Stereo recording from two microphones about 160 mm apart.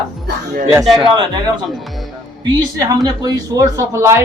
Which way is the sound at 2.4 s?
25° right (ahead or behind).